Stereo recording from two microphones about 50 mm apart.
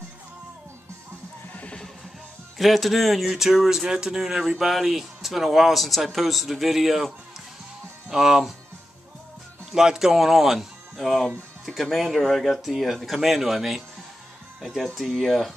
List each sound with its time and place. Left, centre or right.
1.5 s music: left
2.5 s speech: centre
9.7 s speech: centre
15.0 s speech: centre